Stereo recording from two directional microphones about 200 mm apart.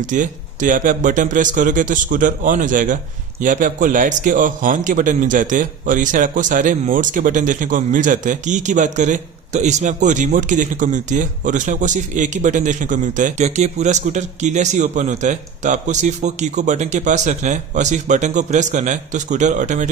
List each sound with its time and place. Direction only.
0.1 s a man's voice: 40° right (ahead or behind)